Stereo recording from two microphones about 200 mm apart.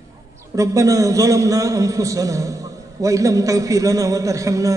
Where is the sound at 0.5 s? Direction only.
15° right (ahead or behind).